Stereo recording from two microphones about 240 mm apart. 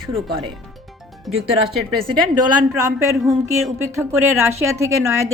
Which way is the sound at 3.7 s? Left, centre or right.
Centre.